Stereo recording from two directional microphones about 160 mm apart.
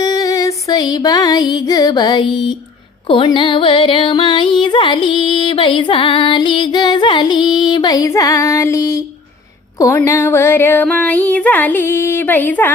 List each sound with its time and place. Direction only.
0.0 s music: 20° left (ahead or behind)
9.7 s female singing: 20° left (ahead or behind)